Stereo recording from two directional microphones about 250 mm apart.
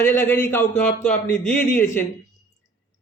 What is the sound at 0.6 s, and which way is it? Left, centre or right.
Speech, left.